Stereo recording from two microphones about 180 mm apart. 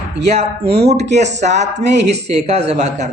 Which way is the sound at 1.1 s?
40° right (ahead or behind).